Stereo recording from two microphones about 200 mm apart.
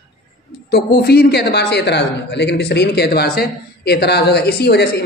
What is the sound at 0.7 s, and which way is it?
Speech, 60° left (ahead or behind).